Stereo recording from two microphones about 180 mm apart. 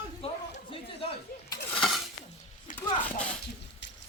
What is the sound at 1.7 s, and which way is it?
Dishes, 5° left (ahead or behind).